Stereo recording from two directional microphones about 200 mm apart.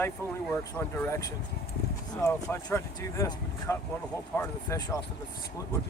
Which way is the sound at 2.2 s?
15° left (ahead or behind).